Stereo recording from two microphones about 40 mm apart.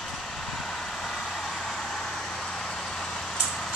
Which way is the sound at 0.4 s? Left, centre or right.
Centre.